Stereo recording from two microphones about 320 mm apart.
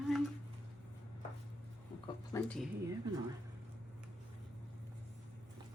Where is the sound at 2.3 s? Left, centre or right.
Centre.